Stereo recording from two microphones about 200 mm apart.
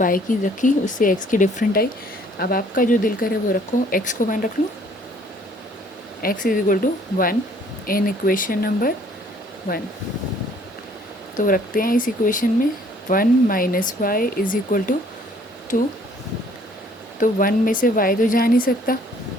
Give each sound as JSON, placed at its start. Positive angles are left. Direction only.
{"t": 0.0, "sound": "speech", "side_deg": 40}
{"t": 6.2, "sound": "speech", "side_deg": 45}
{"t": 7.9, "sound": "speech", "side_deg": 45}
{"t": 11.3, "sound": "speech", "side_deg": 45}
{"t": 17.2, "sound": "speech", "side_deg": 45}